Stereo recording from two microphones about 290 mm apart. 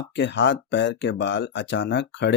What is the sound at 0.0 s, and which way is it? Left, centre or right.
Speech, left.